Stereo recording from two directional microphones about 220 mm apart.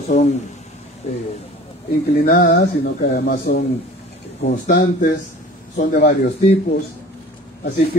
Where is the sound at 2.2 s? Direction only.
40° left (ahead or behind).